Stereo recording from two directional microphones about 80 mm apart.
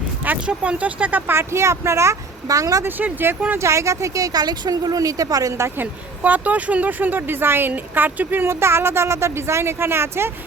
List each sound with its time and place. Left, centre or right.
0.4 s speech: centre
1.3 s speech: right
2.8 s speech: right
3.6 s a woman's voice: right
5.8 s speech: centre